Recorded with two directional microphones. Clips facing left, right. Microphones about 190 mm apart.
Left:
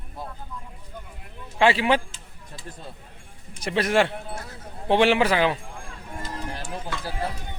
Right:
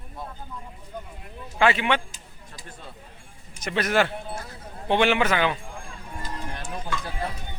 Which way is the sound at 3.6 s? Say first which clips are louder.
Left 2 dB; 30° left (ahead or behind).